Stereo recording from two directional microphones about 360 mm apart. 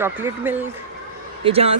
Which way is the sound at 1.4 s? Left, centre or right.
Centre.